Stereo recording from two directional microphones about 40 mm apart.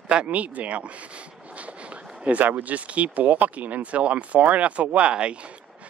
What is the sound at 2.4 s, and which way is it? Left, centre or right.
Speech, right.